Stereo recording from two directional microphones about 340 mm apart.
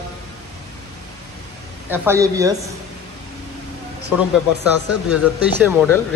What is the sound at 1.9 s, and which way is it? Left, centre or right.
Speech, centre.